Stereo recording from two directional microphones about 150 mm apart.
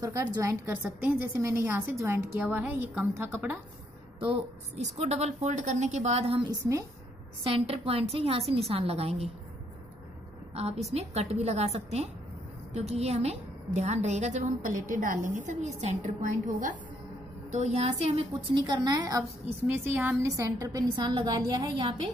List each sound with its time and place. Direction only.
0.0 s a woman's voice: 20° right (ahead or behind)
4.2 s a woman's voice: 35° right (ahead or behind)
10.5 s a woman's voice: 45° right (ahead or behind); by 16.7 s 60° right (ahead or behind)
17.5 s a woman's voice: 50° right (ahead or behind)
18.3 s a woman's voice: 30° right (ahead or behind)
19.6 s a woman's voice: 15° right (ahead or behind)